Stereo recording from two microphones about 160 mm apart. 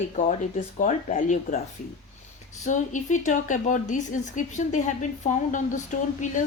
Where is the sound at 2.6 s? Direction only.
50° left (ahead or behind).